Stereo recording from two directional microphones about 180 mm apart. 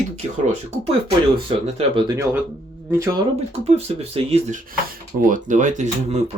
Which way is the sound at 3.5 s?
35° right (ahead or behind).